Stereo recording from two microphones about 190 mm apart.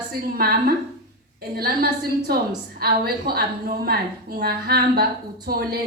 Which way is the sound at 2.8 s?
55° right (ahead or behind).